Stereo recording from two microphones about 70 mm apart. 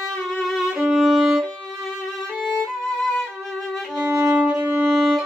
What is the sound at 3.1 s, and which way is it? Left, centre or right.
Violin, centre.